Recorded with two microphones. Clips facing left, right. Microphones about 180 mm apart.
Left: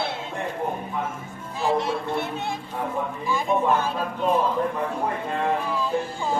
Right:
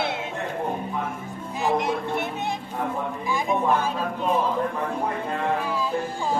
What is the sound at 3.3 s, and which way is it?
Speech, 15° right (ahead or behind).